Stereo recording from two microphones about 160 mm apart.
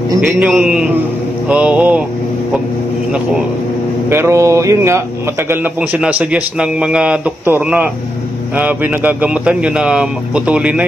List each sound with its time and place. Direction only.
0.4 s a man's voice: 5° right (ahead or behind)
4.1 s a man's voice: 15° right (ahead or behind)